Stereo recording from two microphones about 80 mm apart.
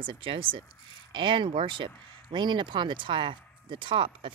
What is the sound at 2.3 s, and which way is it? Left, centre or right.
Speech, right.